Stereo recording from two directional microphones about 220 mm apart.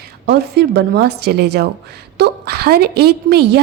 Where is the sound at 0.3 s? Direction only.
50° right (ahead or behind).